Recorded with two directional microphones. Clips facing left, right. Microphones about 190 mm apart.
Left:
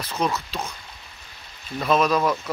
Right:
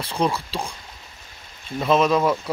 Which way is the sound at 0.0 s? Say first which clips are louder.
Right 2 dB; 30° right (ahead or behind).